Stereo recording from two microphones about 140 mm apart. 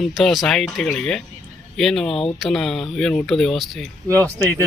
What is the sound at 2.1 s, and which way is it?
Speech, 40° left (ahead or behind).